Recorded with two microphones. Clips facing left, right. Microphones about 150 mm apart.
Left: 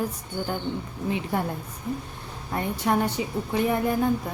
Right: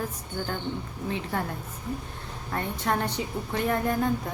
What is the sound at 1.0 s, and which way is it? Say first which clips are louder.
Speech: left 4 dB; 15° left (ahead or behind).